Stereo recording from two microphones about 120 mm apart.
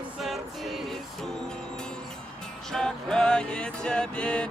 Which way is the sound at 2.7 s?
5° left (ahead or behind).